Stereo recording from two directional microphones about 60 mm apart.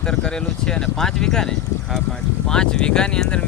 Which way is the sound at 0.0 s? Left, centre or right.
Centre.